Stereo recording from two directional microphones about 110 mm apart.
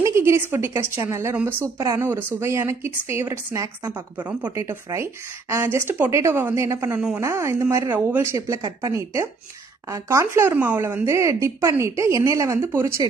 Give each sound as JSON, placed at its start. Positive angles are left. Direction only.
{"t": 0.0, "sound": "a woman's voice", "side_deg": -25}
{"t": 4.2, "sound": "speech", "side_deg": -15}
{"t": 4.6, "sound": "speech", "side_deg": -25}